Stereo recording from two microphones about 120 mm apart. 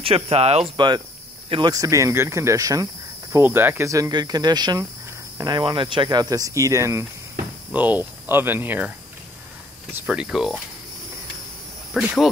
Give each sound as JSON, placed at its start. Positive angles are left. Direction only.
{"t": 0.0, "sound": "speech", "side_deg": -55}
{"t": 0.7, "sound": "speech", "side_deg": -40}
{"t": 7.7, "sound": "speech", "side_deg": -15}
{"t": 9.9, "sound": "speech", "side_deg": -10}
{"t": 11.9, "sound": "speech", "side_deg": 0}